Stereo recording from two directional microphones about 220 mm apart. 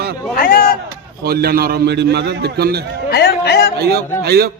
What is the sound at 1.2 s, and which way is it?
A man's voice, 45° right (ahead or behind).